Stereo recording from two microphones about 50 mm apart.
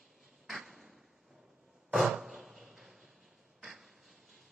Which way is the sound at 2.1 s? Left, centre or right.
Centre.